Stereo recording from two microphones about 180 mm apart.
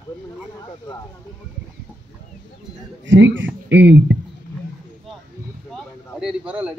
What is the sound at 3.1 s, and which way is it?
Speech, 85° right.